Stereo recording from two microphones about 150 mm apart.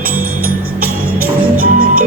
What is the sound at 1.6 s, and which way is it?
Music, 70° right (ahead or behind).